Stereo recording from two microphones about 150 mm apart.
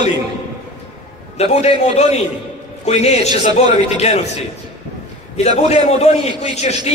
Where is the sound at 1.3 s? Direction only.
45° left (ahead or behind).